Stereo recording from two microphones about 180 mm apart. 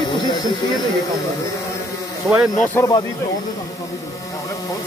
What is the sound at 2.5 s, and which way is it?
Speech, 10° left (ahead or behind).